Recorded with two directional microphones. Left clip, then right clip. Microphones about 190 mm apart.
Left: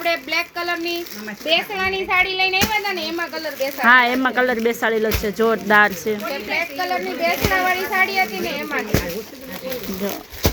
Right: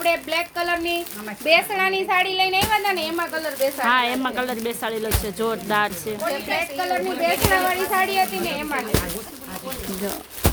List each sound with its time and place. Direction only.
0.0 s speech: 15° right (ahead or behind)
1.5 s a child's voice: 35° right (ahead or behind); by 3.7 s 20° right (ahead or behind)
3.8 s speech: 25° left (ahead or behind)
6.5 s speech: 10° right (ahead or behind)